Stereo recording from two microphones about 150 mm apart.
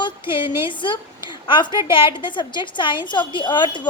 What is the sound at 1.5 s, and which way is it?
A woman's voice, 30° left (ahead or behind).